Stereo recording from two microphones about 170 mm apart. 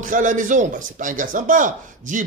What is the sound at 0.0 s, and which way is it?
Speech, 50° right (ahead or behind).